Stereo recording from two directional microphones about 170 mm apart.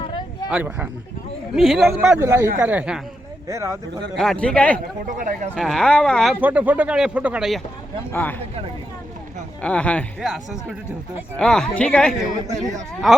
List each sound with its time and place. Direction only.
0.5 s speech: 10° right (ahead or behind)
2.0 s speech: 10° right (ahead or behind)
4.2 s speech: 5° left (ahead or behind)
5.0 s speech: 50° right (ahead or behind)
5.5 s speech: centre (ahead or behind)
6.4 s speech: 10° right (ahead or behind)
8.1 s speech: 10° left (ahead or behind)
9.6 s speech: 5° left (ahead or behind)